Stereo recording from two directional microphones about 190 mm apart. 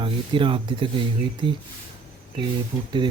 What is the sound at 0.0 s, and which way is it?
Speech, 25° right (ahead or behind).